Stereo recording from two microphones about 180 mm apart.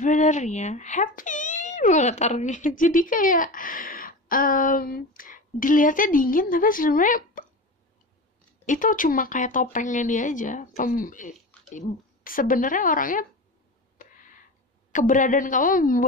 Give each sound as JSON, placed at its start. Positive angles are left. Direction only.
{"t": 0.0, "sound": "speech", "side_deg": 45}
{"t": 8.6, "sound": "speech", "side_deg": 45}
{"t": 14.0, "sound": "a sound", "side_deg": 50}
{"t": 14.9, "sound": "speech", "side_deg": 45}